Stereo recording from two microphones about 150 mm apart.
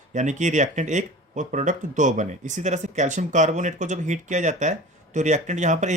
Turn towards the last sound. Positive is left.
turn(degrees=-55)  # may be behind; listen again after turning